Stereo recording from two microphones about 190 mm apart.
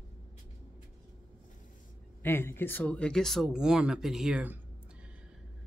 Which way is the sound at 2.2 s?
10° left (ahead or behind).